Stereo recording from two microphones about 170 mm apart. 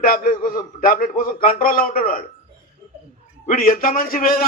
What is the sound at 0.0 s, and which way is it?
A man's voice, 55° left (ahead or behind).